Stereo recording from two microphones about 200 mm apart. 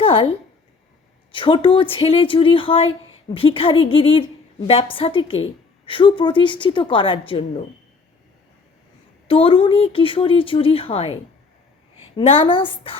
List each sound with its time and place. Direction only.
0.0 s a sound: 25° left (ahead or behind)
1.3 s speech: 25° left (ahead or behind)
9.2 s speech: 25° left (ahead or behind)